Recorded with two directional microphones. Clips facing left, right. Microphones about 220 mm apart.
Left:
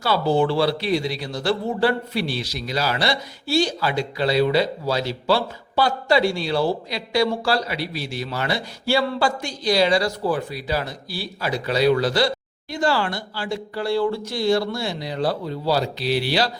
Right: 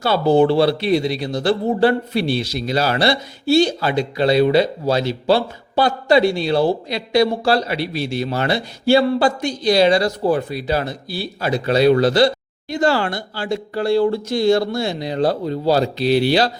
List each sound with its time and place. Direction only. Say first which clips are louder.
0.0 s speech: right 5 dB; 20° right (ahead or behind)
15.2 s speech: right 5 dB; 45° right (ahead or behind)
16.0 s speech: right 6 dB; 25° right (ahead or behind)